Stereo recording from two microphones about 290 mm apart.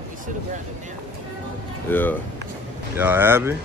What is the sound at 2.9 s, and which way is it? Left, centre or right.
Speech, centre.